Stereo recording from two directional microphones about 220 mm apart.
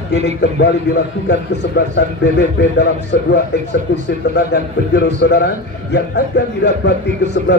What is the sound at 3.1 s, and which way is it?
Speech, 50° left (ahead or behind).